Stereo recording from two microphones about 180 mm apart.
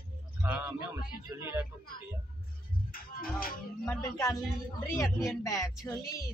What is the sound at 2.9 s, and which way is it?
Music, 55° left (ahead or behind).